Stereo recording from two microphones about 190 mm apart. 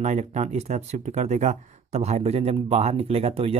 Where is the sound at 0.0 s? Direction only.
35° right (ahead or behind).